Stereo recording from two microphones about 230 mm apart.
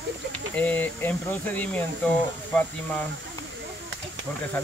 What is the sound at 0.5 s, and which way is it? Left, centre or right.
Speech, centre.